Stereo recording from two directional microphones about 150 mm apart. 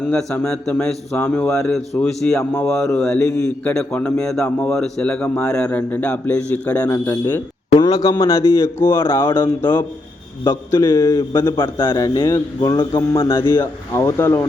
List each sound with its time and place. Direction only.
0.1 s a man's voice: 5° left (ahead or behind)
2.4 s a man's voice: 15° left (ahead or behind)
2.6 s a man's voice: 5° left (ahead or behind)
6.8 s a man's voice: 20° left (ahead or behind)
7.8 s a man's voice: 25° left (ahead or behind)
9.2 s a man's voice: 30° left (ahead or behind)
10.8 s a man's voice: 25° left (ahead or behind)